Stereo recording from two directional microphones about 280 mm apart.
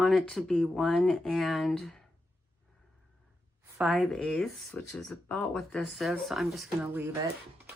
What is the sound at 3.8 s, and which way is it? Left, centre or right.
Speech, centre.